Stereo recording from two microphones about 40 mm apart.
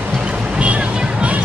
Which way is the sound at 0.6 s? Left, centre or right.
Right.